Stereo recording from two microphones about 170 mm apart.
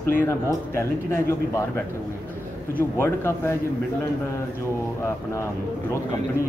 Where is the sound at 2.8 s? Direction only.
15° left (ahead or behind).